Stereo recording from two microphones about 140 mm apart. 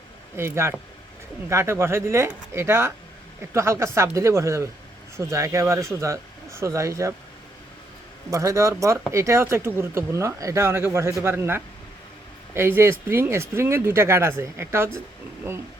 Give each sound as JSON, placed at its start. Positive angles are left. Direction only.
{"t": 0.3, "sound": "speech", "side_deg": -20}
{"t": 8.3, "sound": "speech", "side_deg": -20}